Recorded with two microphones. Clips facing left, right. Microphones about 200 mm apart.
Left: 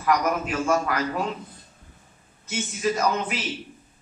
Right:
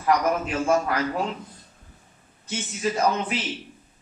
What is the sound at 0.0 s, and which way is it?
A man's voice, 30° right (ahead or behind).